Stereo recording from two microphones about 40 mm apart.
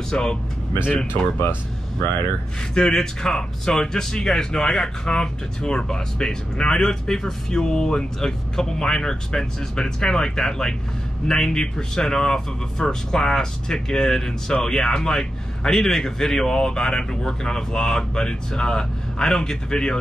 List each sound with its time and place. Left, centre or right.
0.1 s speech: centre
2.7 s speech: centre